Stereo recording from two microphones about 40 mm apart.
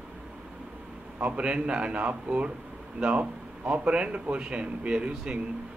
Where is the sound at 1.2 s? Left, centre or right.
Right.